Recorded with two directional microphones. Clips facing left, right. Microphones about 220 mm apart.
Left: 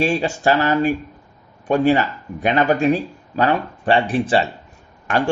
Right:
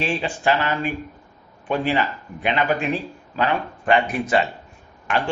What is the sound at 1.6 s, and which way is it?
Speech, 45° left (ahead or behind).